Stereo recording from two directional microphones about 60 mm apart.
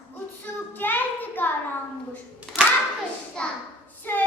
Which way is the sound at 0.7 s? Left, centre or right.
Left.